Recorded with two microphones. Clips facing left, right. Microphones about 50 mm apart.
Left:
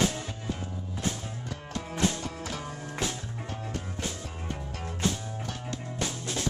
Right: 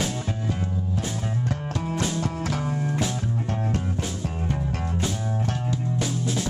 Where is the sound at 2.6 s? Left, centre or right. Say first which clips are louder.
Right 11 dB; right.